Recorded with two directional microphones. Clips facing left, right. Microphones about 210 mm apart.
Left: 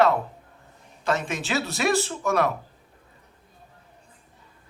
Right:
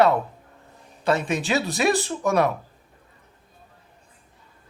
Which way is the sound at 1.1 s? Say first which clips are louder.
Right 4 dB; 15° right (ahead or behind).